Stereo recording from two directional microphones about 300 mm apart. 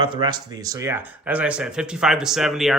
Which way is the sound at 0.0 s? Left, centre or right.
Centre.